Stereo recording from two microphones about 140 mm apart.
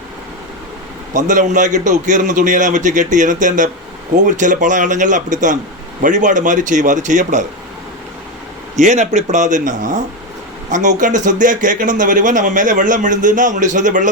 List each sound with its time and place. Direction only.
1.1 s speech: 65° right (ahead or behind)
8.7 s speech: 60° right (ahead or behind)